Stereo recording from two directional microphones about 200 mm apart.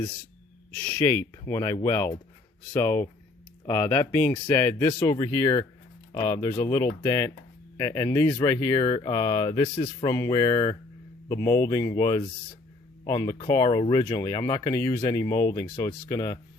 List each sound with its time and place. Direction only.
0.7 s speech: 10° left (ahead or behind)